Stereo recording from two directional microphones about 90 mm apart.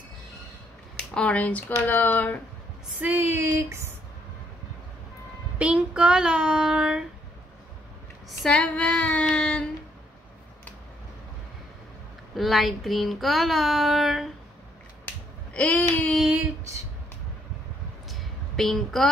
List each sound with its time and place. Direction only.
0.9 s speech: 10° left (ahead or behind)
3.0 s a sound: 25° right (ahead or behind)
5.6 s child singing: 10° right (ahead or behind)
8.3 s speech: 5° left (ahead or behind)
12.4 s child singing: centre (ahead or behind)
15.5 s speech: 15° left (ahead or behind)
16.2 s female singing: 10° right (ahead or behind)
18.1 s a sound: 5° left (ahead or behind)